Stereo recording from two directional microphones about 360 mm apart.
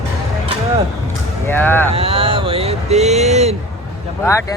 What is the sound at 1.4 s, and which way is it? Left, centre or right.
Speech, centre.